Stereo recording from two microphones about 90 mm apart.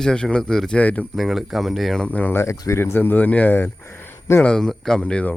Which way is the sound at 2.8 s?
25° left (ahead or behind).